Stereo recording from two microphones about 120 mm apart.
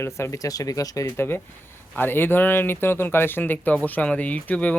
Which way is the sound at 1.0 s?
20° left (ahead or behind).